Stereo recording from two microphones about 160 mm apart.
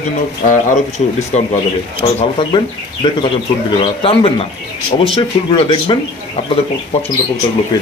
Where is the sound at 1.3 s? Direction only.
45° left (ahead or behind).